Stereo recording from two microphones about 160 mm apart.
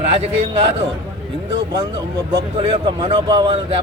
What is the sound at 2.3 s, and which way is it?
A man's voice, 30° right (ahead or behind).